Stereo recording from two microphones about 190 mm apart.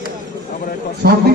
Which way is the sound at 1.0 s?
55° right (ahead or behind).